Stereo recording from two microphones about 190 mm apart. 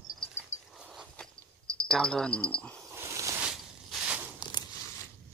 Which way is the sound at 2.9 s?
15° right (ahead or behind).